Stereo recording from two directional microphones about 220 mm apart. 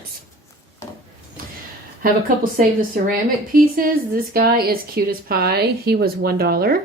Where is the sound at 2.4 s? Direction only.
40° right (ahead or behind).